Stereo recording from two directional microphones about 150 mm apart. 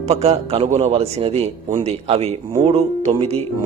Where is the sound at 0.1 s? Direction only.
45° right (ahead or behind).